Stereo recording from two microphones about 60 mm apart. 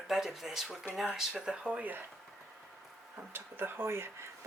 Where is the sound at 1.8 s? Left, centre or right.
Right.